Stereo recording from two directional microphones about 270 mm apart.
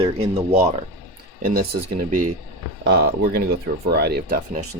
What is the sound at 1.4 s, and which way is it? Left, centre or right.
Speech, right.